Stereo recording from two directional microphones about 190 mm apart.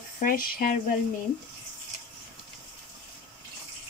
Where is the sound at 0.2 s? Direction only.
50° left (ahead or behind).